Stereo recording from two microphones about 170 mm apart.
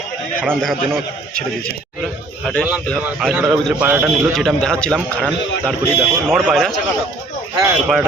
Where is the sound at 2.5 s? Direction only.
5° left (ahead or behind).